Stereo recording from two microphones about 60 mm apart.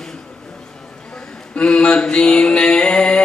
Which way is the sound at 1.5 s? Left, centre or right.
Centre.